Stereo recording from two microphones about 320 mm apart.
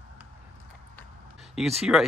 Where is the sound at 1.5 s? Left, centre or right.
Centre.